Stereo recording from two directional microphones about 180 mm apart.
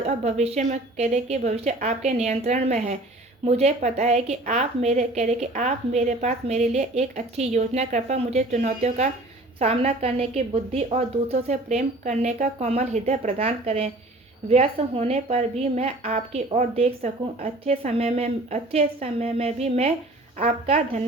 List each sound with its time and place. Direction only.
0.0 s a woman's voice: 35° right (ahead or behind)